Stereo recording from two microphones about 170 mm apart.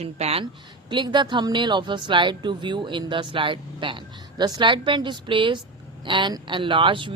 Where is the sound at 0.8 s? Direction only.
25° right (ahead or behind).